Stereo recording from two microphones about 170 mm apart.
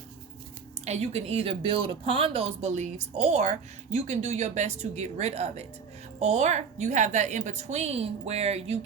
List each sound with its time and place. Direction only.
0.9 s speech: 40° right (ahead or behind)